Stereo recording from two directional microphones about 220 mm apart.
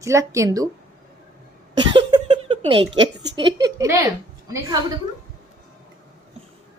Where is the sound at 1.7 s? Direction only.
20° right (ahead or behind).